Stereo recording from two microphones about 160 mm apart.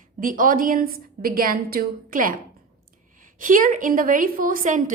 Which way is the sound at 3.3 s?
55° right (ahead or behind).